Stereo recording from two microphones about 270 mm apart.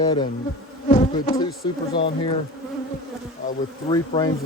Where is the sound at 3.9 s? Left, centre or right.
Centre.